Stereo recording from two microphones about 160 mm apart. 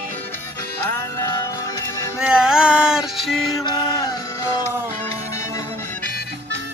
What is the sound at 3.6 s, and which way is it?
Chant, 25° left (ahead or behind).